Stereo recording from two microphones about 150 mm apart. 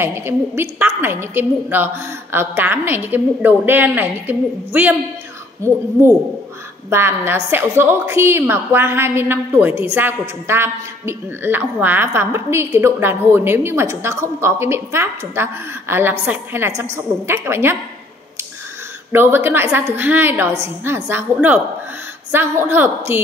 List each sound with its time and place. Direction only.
0.0 s a woman's voice: 15° right (ahead or behind)
6.9 s a woman's voice: 15° right (ahead or behind)
19.1 s a woman's voice: 15° right (ahead or behind)